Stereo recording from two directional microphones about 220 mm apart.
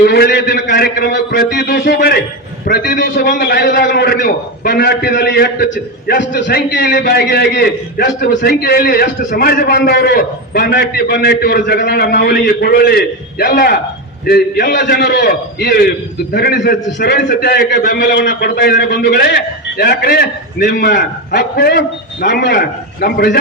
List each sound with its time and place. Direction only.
0.0 s a man's voice: 45° left (ahead or behind)